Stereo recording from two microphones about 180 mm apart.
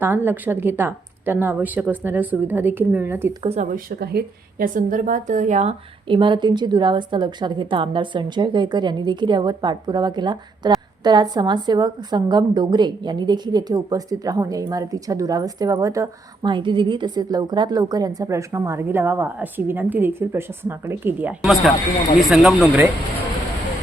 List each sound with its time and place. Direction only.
0.0 s a woman's voice: 10° right (ahead or behind)
3.4 s a woman's voice: 40° right (ahead or behind)
6.1 s a woman's voice: 25° right (ahead or behind); by 21.3 s 10° right (ahead or behind)
21.4 s speech: centre (ahead or behind)